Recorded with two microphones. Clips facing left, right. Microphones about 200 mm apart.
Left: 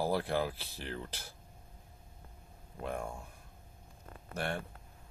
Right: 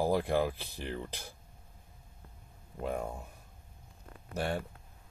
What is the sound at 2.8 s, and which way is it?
Speech, 20° right (ahead or behind).